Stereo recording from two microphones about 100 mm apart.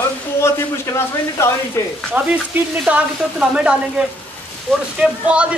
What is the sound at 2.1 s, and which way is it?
Speech, 10° right (ahead or behind).